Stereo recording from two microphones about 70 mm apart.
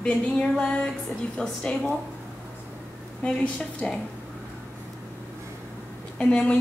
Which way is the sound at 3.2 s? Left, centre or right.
Centre.